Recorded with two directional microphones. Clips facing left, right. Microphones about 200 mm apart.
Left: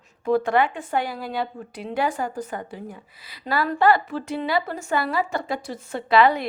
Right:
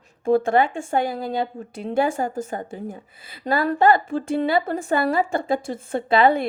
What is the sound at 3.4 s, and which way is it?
A woman's voice, 45° right (ahead or behind).